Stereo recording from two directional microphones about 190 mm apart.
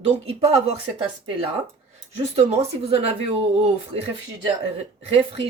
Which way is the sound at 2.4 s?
30° right (ahead or behind).